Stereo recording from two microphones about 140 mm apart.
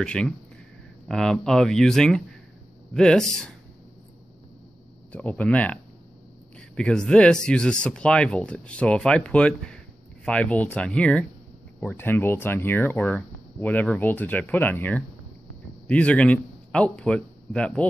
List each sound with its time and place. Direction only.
0.0 s speech: 5° left (ahead or behind)
5.1 s speech: 5° left (ahead or behind)
6.8 s a man's voice: 5° left (ahead or behind)